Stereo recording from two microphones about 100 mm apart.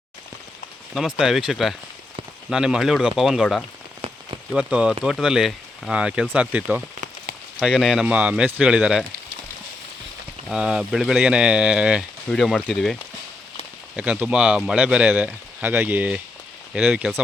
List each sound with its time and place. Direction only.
0.9 s speech: 5° right (ahead or behind)
4.0 s rain on surface: 80° right
4.5 s speech: 10° right (ahead or behind)
10.5 s speech: 10° right (ahead or behind)
12.3 s speech: centre (ahead or behind)
13.9 s speech: 10° right (ahead or behind)